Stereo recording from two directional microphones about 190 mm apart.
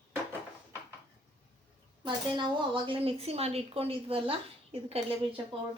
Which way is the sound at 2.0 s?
25° right (ahead or behind).